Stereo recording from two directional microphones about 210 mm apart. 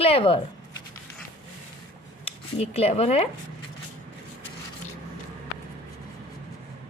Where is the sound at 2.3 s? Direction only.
30° left (ahead or behind).